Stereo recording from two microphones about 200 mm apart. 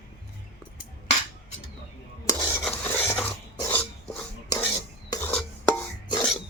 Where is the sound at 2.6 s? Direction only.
10° left (ahead or behind).